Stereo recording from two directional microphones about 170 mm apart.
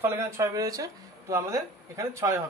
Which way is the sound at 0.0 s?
15° right (ahead or behind).